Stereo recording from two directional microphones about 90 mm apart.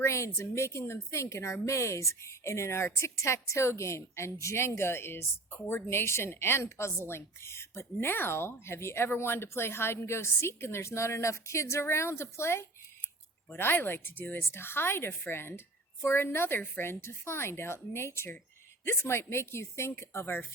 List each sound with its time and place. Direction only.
0.0 s a woman's voice: 30° left (ahead or behind)